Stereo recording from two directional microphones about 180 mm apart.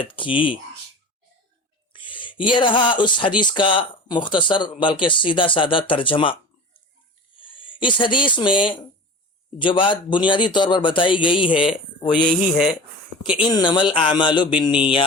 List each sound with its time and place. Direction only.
0.0 s a man's voice: 30° left (ahead or behind)
1.9 s a man's voice: 25° left (ahead or behind)
13.4 s a man's voice: 25° left (ahead or behind)